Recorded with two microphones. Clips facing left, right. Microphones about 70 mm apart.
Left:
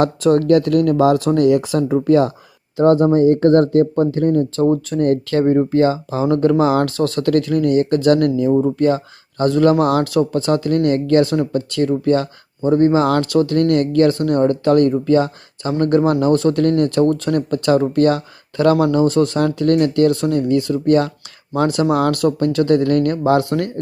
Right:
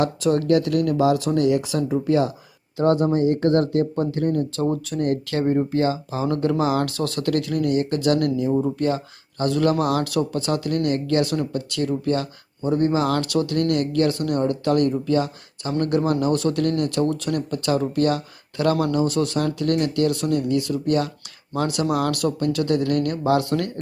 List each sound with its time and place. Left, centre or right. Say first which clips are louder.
0.0 s speech: left 6 dB; left
2.7 s speech: left 6 dB; left